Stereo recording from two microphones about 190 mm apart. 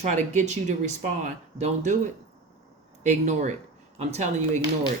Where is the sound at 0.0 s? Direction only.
35° right (ahead or behind).